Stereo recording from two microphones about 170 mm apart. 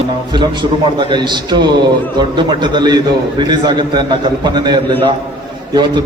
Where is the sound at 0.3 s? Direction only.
25° right (ahead or behind).